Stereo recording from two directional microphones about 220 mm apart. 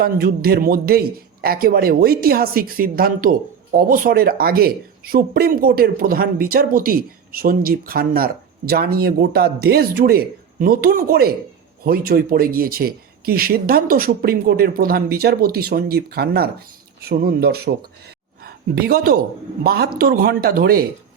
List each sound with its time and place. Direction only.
0.0 s a man's voice: 45° right (ahead or behind)